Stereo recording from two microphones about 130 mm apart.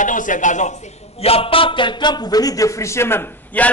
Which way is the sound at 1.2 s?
50° left (ahead or behind).